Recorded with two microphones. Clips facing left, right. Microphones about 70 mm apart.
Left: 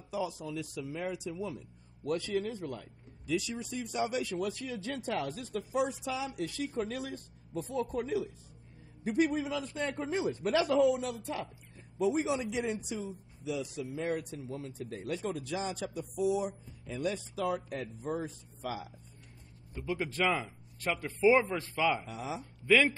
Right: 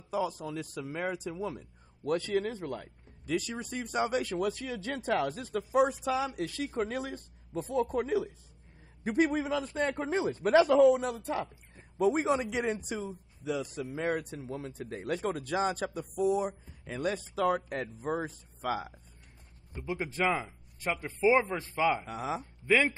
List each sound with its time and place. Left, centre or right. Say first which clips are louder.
0.1 s speech: right 3 dB; right
2.2 s speech: right 3 dB; right
19.9 s speech: right 1 dB; right
22.0 s speech: right 4 dB; right
22.6 s a woman's voice: left 1 dB; right